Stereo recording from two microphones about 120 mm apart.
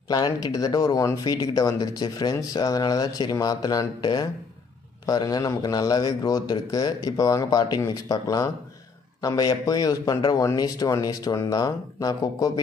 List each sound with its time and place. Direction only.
0.1 s speech: 35° left (ahead or behind)